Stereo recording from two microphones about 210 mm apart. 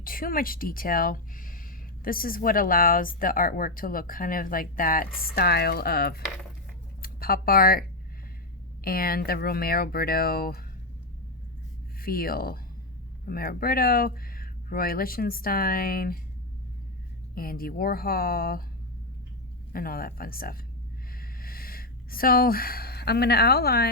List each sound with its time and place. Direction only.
0.0 s speech: 40° left (ahead or behind)
11.9 s speech: 45° left (ahead or behind)
17.3 s speech: 45° left (ahead or behind)
19.7 s speech: 45° left (ahead or behind)
21.1 s a sound: 45° left (ahead or behind)